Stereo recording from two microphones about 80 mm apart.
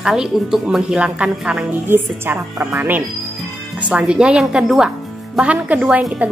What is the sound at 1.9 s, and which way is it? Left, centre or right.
A woman's voice, right.